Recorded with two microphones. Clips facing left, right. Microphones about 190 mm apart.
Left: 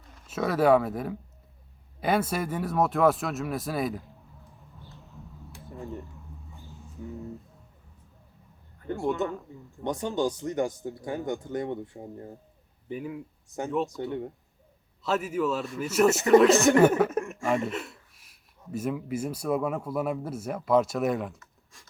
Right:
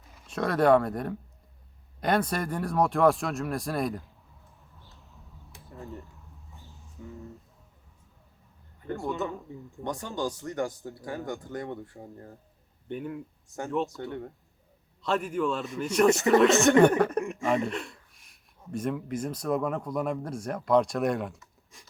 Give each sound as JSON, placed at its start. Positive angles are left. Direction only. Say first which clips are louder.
{"t": 0.1, "sound": "speech", "louder": "left 1 dB", "side_deg": 5}
{"t": 4.9, "sound": "a sound", "louder": "left 9 dB", "side_deg": 0}
{"t": 9.2, "sound": "speech", "louder": "left 2 dB", "side_deg": 20}
{"t": 12.9, "sound": "speech", "louder": "even", "side_deg": 0}
{"t": 13.9, "sound": "speech", "louder": "left 4 dB", "side_deg": 20}
{"t": 15.0, "sound": "speech", "louder": "left 1 dB", "side_deg": 5}